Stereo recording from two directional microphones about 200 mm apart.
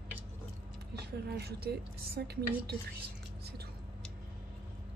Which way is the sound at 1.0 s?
55° right (ahead or behind).